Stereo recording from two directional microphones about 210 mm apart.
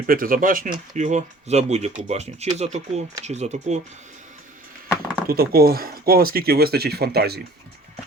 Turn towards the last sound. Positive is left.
turn(degrees=-50)  # may be behind; listen again after turning